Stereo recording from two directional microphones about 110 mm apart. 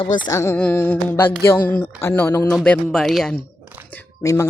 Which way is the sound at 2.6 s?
5° left (ahead or behind).